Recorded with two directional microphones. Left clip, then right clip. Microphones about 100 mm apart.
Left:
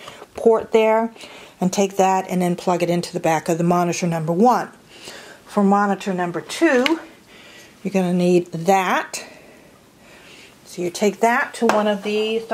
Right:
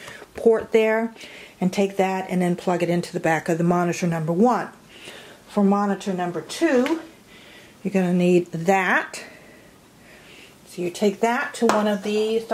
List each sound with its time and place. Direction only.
0.0 s speech: 5° left (ahead or behind)
1.6 s speech: 30° left (ahead or behind)
5.5 s speech: 45° left (ahead or behind)
7.9 s speech: 20° left (ahead or behind)
10.9 s speech: 35° left (ahead or behind)
11.6 s speech: 5° left (ahead or behind)